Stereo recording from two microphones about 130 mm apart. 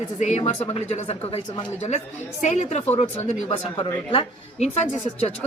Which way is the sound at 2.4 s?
60° left (ahead or behind).